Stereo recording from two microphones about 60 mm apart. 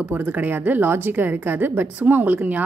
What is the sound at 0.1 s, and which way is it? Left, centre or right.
A woman's voice, right.